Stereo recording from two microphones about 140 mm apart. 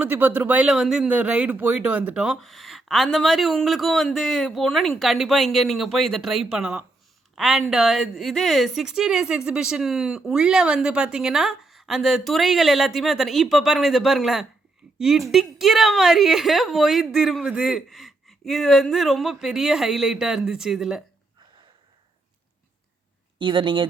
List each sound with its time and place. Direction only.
0.0 s a woman's voice: 10° right (ahead or behind)
23.4 s speech: 35° right (ahead or behind)